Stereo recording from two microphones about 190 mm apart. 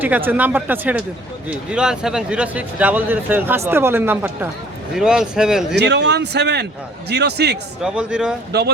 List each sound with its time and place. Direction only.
0.0 s speech: 10° right (ahead or behind)
5.7 s a man's voice: 65° right (ahead or behind)
7.8 s speech: 5° right (ahead or behind)